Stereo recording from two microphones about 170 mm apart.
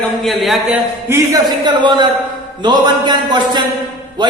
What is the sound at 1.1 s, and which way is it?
A man's voice, 25° right (ahead or behind).